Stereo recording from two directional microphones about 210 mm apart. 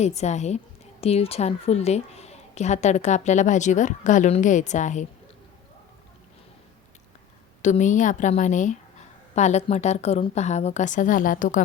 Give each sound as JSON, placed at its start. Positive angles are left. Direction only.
{"t": 0.0, "sound": "a woman's voice", "side_deg": 30}
{"t": 7.6, "sound": "a woman's voice", "side_deg": 35}